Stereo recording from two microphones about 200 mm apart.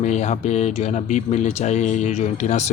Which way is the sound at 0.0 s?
35° left (ahead or behind).